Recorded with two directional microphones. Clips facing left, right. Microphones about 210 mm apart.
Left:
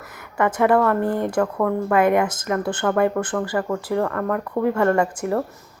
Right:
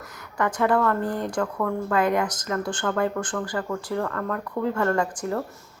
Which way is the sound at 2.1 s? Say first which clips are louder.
Left 5 dB; 25° left (ahead or behind).